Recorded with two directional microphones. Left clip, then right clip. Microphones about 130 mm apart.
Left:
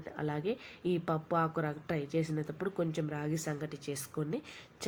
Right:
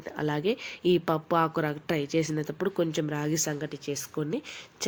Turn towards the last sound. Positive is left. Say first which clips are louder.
# right 7 dB
turn(degrees=-20)  # may be behind; listen again after turning